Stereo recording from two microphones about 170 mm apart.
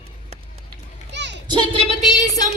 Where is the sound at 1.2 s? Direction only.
90° right.